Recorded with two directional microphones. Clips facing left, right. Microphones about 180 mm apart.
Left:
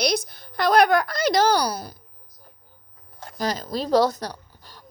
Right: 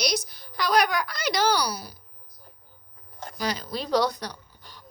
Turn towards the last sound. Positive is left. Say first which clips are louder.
# left 4 dB
turn(degrees=40)  # may be behind; listen again after turning